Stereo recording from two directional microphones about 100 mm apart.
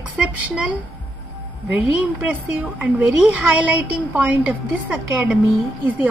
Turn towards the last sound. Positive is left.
turn(degrees=-15)  # may be behind; listen again after turning